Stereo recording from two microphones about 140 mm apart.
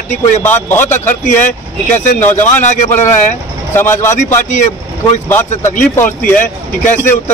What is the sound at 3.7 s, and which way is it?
A man's voice, 15° left (ahead or behind).